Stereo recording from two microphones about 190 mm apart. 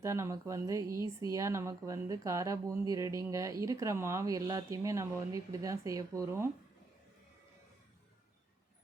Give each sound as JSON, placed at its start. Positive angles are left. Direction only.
{"t": 0.0, "sound": "speech", "side_deg": -15}